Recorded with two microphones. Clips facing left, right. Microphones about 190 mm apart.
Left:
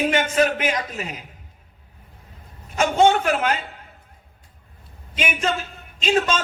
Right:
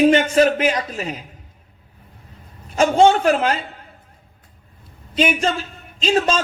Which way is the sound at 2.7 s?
30° right (ahead or behind).